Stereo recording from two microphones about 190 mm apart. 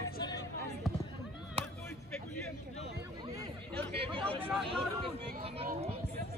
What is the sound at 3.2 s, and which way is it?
Chatter, 20° right (ahead or behind).